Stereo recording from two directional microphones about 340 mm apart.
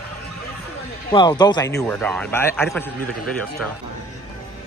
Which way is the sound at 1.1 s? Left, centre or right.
Centre.